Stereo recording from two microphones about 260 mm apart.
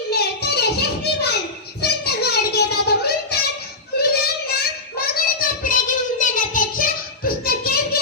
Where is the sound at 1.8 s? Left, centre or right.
Left.